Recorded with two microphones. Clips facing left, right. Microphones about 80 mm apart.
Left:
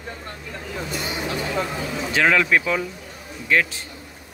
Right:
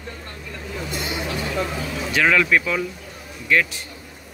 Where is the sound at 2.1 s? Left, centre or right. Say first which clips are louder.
Even; left.